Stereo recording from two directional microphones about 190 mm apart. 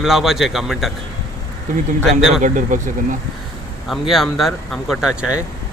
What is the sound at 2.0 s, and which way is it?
Speech, centre (ahead or behind).